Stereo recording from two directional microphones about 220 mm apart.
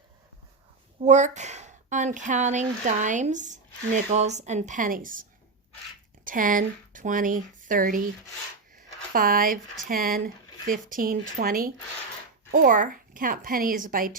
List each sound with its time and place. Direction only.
1.0 s speech: 35° right (ahead or behind)
6.2 s speech: 40° right (ahead or behind)
9.1 s speech: 40° right (ahead or behind)